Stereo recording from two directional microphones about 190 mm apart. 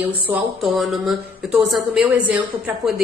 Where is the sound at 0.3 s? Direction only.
5° right (ahead or behind).